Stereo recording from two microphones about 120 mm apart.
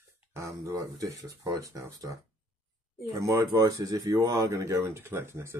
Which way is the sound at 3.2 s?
30° right (ahead or behind).